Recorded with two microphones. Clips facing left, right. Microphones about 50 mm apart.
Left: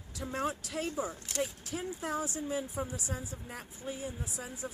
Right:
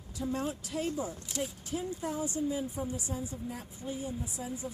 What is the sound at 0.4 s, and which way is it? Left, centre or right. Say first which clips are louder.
Speech: right 1 dB; left.